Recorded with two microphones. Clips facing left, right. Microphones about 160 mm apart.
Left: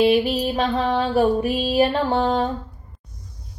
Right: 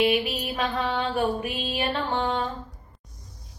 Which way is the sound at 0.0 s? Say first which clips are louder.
Left 6 dB; 35° left (ahead or behind).